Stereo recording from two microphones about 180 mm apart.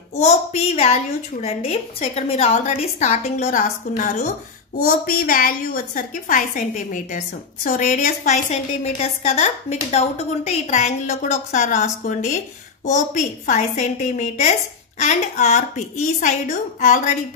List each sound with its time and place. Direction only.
0.1 s a woman's voice: 40° left (ahead or behind)